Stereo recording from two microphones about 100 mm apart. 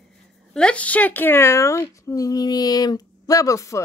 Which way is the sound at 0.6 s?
10° left (ahead or behind).